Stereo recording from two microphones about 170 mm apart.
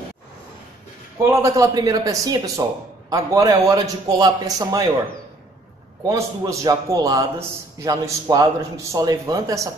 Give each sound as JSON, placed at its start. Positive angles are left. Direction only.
{"t": 1.4, "sound": "a man's voice", "side_deg": -20}
{"t": 6.0, "sound": "a man's voice", "side_deg": -20}